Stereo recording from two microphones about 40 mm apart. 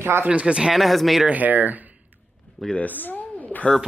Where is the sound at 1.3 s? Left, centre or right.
Right.